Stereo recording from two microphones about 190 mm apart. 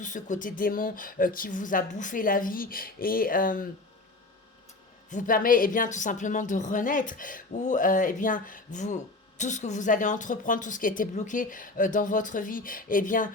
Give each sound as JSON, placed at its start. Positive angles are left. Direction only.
{"t": 0.0, "sound": "a woman's voice", "side_deg": 45}
{"t": 5.1, "sound": "a woman's voice", "side_deg": 45}